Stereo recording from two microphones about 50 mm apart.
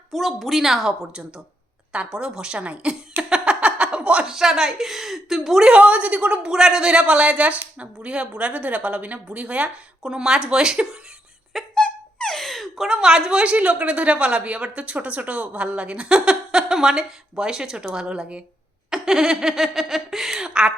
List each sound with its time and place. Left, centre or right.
0.1 s a woman's voice: centre
2.1 s a sound: centre
4.3 s speech: centre
5.6 s a woman's voice: right
6.5 s a woman's voice: centre
11.7 s gasp: centre
12.9 s speech: centre
13.4 s a woman's voice: right